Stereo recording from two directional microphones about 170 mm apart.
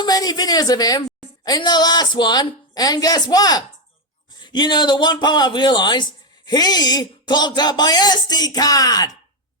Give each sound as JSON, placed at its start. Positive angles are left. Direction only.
{"t": 0.0, "sound": "speech", "side_deg": 25}